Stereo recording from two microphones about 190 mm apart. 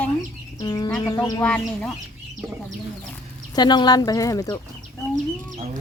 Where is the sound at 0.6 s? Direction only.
20° left (ahead or behind).